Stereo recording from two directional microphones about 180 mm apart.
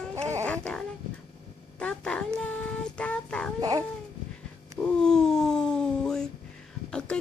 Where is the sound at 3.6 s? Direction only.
20° right (ahead or behind).